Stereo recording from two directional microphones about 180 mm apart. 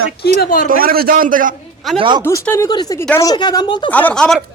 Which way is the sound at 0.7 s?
55° right (ahead or behind).